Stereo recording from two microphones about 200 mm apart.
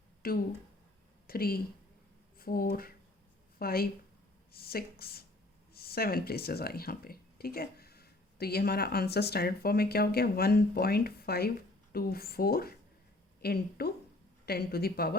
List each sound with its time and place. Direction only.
0.2 s speech: 45° left (ahead or behind)